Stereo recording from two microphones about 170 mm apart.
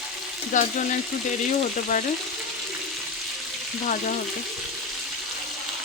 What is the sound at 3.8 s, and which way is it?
Frying, 50° left (ahead or behind).